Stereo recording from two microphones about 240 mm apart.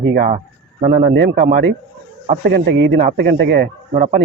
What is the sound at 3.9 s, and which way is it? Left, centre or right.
Speech, right.